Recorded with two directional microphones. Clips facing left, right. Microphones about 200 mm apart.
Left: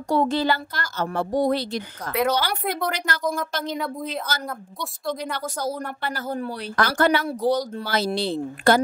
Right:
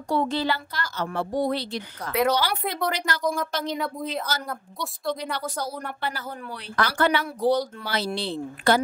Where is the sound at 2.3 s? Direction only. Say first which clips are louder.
Left 1 dB; 50° left (ahead or behind).